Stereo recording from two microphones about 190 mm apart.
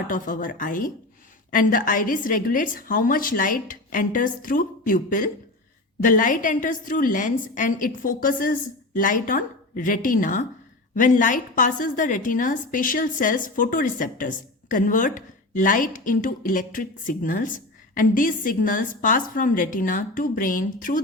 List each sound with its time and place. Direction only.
0.1 s a woman's voice: 45° left (ahead or behind)